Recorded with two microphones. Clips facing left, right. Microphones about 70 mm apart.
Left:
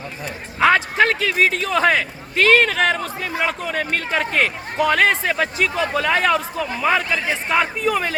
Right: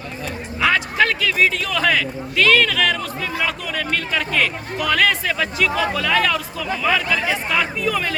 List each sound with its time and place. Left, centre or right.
0.6 s a man's voice: left